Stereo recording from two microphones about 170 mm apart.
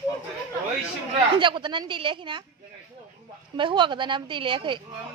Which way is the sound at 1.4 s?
30° right (ahead or behind).